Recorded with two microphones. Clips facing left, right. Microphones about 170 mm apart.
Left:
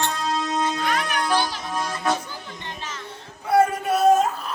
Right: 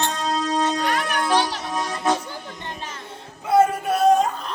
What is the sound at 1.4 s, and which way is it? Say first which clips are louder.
Music: right 2 dB; 75° right (ahead or behind).